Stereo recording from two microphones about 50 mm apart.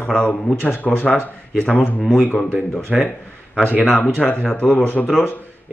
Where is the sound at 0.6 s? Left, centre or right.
Left.